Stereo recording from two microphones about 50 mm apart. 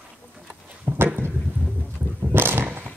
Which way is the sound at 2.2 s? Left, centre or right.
Right.